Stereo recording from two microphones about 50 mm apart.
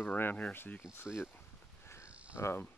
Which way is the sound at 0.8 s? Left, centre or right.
Centre.